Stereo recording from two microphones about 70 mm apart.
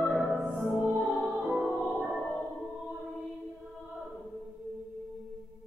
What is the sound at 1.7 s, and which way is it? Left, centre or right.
Music, centre.